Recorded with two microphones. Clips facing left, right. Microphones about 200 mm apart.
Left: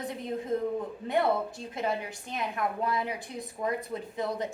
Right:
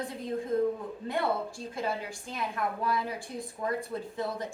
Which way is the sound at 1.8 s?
20° left (ahead or behind).